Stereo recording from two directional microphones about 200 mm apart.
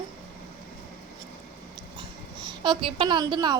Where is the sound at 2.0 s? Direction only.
20° right (ahead or behind).